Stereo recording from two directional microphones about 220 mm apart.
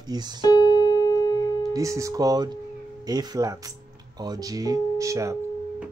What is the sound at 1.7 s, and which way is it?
Speech, 15° right (ahead or behind).